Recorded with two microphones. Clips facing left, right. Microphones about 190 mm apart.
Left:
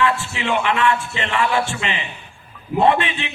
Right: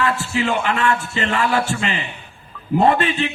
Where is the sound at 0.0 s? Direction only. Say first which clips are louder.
Right 1 dB; 40° right (ahead or behind).